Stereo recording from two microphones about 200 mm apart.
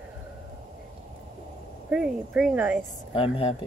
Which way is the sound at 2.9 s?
30° left (ahead or behind).